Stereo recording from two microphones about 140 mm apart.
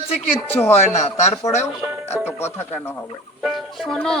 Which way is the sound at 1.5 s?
25° left (ahead or behind).